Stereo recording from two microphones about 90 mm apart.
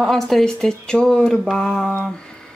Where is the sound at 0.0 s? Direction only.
Centre (ahead or behind).